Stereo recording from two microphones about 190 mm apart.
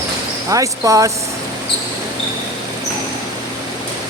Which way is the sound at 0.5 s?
15° right (ahead or behind).